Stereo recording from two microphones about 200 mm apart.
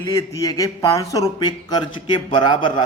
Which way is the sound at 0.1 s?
15° left (ahead or behind).